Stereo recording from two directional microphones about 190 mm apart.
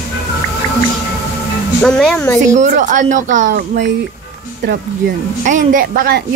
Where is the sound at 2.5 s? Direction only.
40° right (ahead or behind).